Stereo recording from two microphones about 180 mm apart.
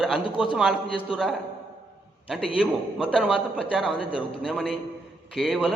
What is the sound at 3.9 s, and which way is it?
Speech, 30° left (ahead or behind).